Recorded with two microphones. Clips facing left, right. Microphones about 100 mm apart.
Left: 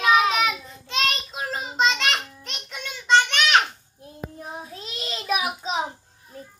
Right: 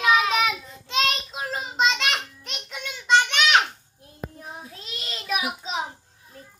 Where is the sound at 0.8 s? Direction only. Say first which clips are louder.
Right 1 dB; 15° right (ahead or behind).